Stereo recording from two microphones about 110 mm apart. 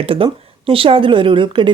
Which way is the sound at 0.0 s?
55° right (ahead or behind).